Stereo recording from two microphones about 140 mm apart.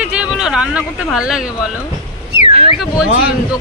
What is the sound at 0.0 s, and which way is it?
Speech, 5° right (ahead or behind).